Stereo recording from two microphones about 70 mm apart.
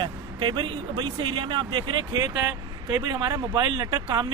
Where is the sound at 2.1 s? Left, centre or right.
Right.